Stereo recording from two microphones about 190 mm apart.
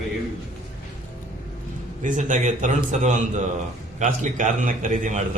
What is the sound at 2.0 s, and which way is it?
A man's voice, 40° right (ahead or behind).